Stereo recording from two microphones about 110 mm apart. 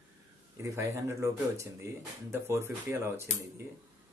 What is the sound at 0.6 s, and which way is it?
Speech, 25° right (ahead or behind).